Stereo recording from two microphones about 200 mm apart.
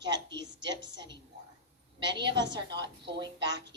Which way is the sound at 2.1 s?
25° right (ahead or behind).